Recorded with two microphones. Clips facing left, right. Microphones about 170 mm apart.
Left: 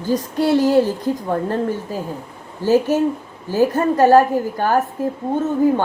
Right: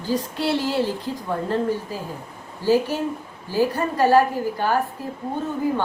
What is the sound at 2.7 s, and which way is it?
A woman's voice, 45° left (ahead or behind).